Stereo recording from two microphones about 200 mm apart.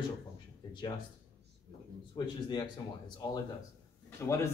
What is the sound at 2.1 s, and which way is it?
Speech, 20° left (ahead or behind).